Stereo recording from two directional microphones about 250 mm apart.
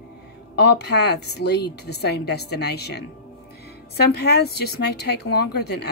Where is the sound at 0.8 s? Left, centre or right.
Left.